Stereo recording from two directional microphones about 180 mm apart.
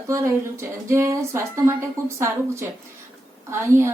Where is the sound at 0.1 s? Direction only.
15° right (ahead or behind).